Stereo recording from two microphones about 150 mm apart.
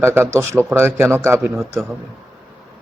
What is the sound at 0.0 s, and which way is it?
A man's voice, 15° right (ahead or behind).